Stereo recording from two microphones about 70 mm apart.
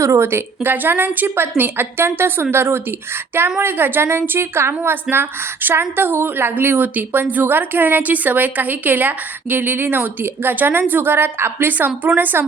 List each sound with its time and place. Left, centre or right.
0.0 s a woman's voice: right